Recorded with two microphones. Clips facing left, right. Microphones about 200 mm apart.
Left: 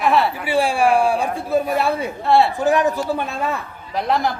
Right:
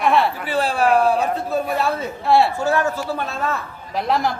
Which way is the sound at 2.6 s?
15° left (ahead or behind).